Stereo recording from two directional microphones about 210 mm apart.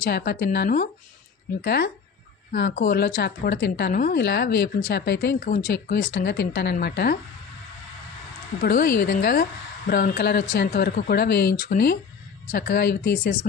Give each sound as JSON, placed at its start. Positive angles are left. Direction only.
{"t": 0.0, "sound": "a woman's voice", "side_deg": 45}
{"t": 8.6, "sound": "a woman's voice", "side_deg": 40}